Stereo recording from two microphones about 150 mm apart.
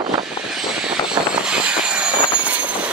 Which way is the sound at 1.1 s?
5° right (ahead or behind).